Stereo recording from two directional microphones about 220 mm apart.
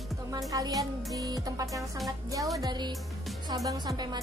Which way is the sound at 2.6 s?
20° right (ahead or behind).